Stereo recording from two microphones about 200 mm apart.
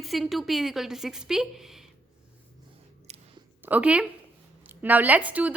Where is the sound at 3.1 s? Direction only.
35° right (ahead or behind).